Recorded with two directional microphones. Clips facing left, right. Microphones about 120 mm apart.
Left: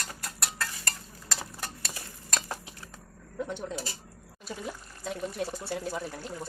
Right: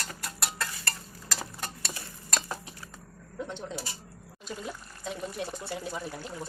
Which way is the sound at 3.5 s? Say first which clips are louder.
Left 3 dB; 5° left (ahead or behind).